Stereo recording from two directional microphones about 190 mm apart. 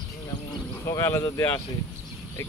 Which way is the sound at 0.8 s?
15° left (ahead or behind).